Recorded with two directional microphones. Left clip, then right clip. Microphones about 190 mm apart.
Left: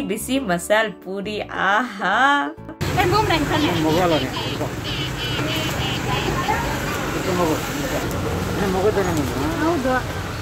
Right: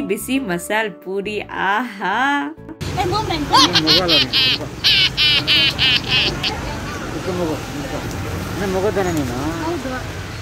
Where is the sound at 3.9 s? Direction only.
55° right (ahead or behind).